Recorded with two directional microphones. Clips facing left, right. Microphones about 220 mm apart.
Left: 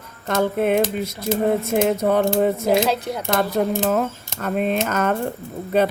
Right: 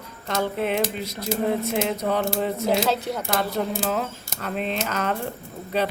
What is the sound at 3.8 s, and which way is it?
Speech, 50° left (ahead or behind).